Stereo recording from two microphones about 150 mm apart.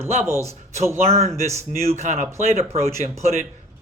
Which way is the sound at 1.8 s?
50° right (ahead or behind).